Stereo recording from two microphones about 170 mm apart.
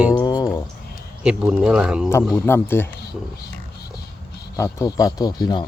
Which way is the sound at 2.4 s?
15° left (ahead or behind).